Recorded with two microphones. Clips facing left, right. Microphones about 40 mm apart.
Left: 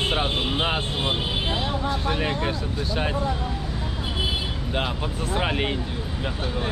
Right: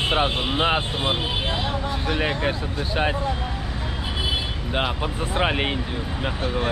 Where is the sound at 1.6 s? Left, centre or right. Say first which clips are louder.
Even; centre.